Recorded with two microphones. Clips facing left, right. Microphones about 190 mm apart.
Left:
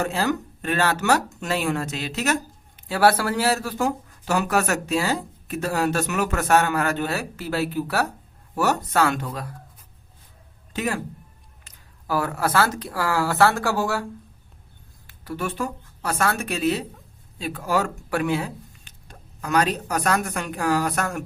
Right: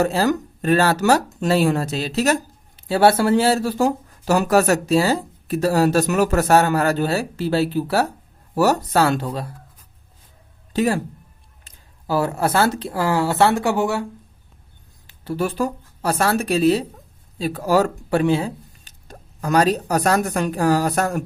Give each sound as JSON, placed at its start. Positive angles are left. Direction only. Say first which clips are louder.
{"t": 0.0, "sound": "speech", "louder": "right 5 dB", "side_deg": -35}
{"t": 10.7, "sound": "a woman's voice", "louder": "right 7 dB", "side_deg": -35}